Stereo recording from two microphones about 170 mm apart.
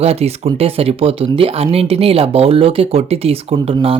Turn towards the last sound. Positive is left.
turn(degrees=-35)  # may be behind; listen again after turning